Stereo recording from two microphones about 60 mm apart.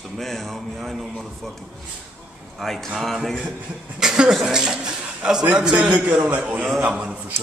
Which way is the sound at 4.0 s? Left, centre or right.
Centre.